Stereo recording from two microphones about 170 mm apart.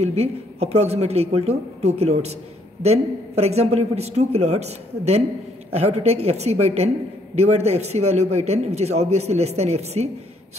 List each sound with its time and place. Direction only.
0.0 s a man's voice: 40° right (ahead or behind)